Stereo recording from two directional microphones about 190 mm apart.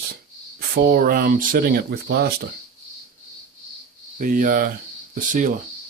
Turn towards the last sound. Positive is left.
turn(degrees=-45)  # may be behind; listen again after turning